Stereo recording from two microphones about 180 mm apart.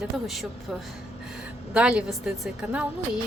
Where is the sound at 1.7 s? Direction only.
5° right (ahead or behind).